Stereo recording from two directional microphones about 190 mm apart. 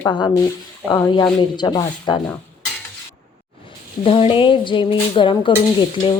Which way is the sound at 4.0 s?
30° left (ahead or behind).